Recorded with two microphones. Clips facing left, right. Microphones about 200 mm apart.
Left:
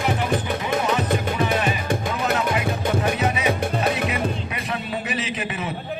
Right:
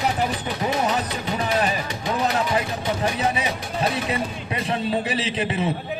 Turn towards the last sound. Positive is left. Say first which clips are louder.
# right 3 dB
turn(degrees=-30)  # may be behind; listen again after turning